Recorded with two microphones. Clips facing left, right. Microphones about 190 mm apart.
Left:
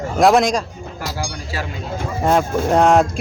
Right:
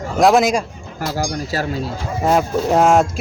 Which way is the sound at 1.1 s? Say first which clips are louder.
Right 8 dB; 40° right (ahead or behind).